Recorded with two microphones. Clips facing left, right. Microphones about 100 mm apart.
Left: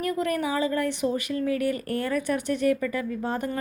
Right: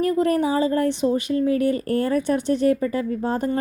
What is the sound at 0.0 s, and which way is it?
Speech, 30° right (ahead or behind).